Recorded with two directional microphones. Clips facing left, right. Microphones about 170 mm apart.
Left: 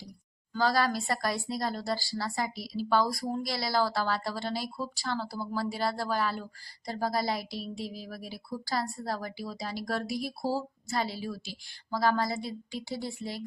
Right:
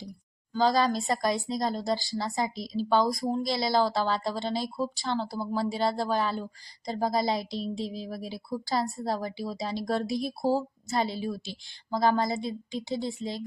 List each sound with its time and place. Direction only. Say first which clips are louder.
0.5 s speech: right 3 dB; 20° right (ahead or behind)